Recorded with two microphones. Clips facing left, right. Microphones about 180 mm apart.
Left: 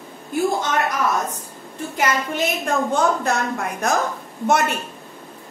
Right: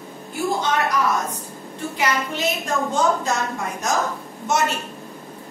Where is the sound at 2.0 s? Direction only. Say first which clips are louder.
Left 2 dB; 55° left (ahead or behind).